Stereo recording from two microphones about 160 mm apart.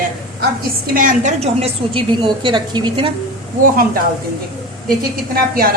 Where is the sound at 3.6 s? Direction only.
65° right (ahead or behind).